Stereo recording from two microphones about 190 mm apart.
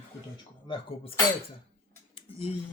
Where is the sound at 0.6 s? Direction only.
25° left (ahead or behind).